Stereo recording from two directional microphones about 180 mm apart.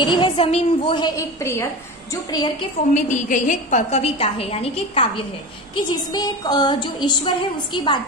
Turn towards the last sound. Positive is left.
turn(degrees=25)  # may be behind; listen again after turning